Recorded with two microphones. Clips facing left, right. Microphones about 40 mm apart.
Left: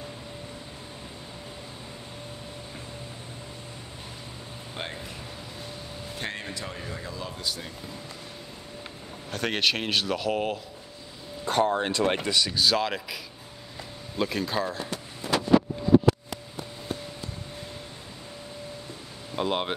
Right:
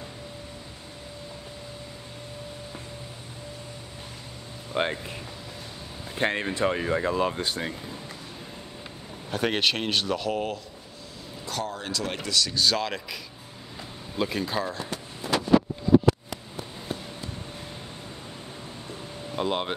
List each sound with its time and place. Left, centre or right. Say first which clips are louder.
4.8 s speech: right 10 dB; right
6.1 s speech: right 9 dB; right
9.3 s speech: right 1 dB; centre
11.4 s speech: left 8 dB; left
12.5 s speech: left 1 dB; centre
19.3 s speech: even; centre